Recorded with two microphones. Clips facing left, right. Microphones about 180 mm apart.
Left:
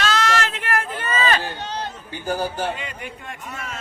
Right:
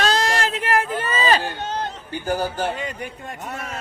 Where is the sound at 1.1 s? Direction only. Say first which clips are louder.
Right 1 dB; 35° right (ahead or behind).